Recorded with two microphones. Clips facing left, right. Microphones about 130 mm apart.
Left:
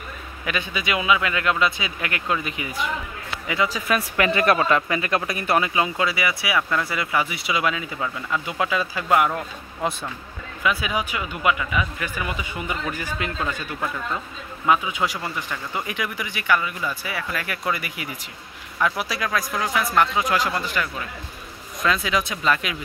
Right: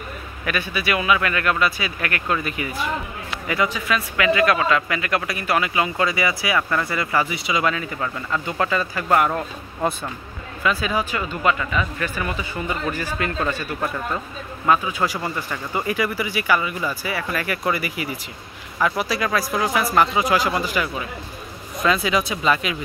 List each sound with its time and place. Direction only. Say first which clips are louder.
0.5 s speech: right 2 dB; 20° left (ahead or behind)
3.7 s speech: even; 45° left (ahead or behind)
4.3 s speech: right 2 dB; 30° left (ahead or behind)
5.9 s speech: right 2 dB; 5° left (ahead or behind)
10.6 s speech: right 2 dB; 10° left (ahead or behind)
14.7 s speech: right 1 dB; 15° left (ahead or behind)
15.0 s speech: right 3 dB; 5° right (ahead or behind)